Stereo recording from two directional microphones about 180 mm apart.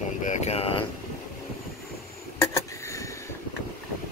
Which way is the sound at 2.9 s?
15° left (ahead or behind).